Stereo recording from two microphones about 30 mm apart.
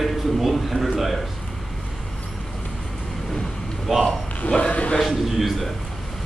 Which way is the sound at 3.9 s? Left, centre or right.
Centre.